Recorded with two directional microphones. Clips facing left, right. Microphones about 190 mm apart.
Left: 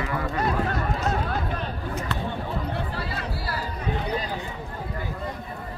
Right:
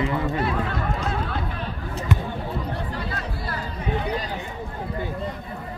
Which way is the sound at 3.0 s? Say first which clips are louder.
Even; 5° left (ahead or behind).